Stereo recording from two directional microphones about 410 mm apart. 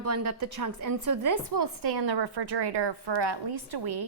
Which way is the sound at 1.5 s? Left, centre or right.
Right.